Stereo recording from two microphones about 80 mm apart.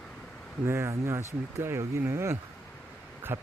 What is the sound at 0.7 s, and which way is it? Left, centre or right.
Speech, right.